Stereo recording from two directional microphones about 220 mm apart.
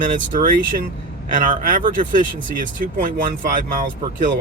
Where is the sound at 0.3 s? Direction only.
40° right (ahead or behind).